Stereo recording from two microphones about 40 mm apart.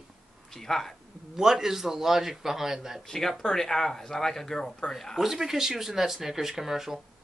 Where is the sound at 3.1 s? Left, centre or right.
Centre.